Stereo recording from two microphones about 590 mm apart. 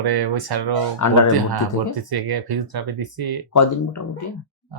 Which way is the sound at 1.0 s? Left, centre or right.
Left.